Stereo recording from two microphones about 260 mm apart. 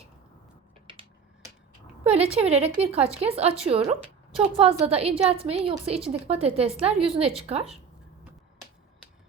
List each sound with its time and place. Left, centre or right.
2.1 s a woman's voice: right